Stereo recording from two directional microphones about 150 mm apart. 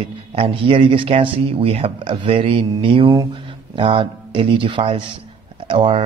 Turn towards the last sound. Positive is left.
turn(degrees=-35)  # may be behind; listen again after turning